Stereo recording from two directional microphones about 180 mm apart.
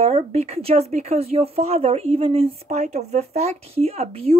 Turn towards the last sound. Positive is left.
turn(degrees=-35)  # may be behind; listen again after turning